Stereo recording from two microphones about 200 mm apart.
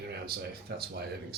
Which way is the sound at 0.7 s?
50° right (ahead or behind).